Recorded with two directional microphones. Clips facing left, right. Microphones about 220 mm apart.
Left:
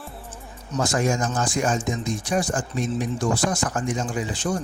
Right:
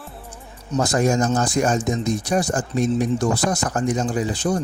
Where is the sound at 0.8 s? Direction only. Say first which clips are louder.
Right 4 dB; 40° right (ahead or behind).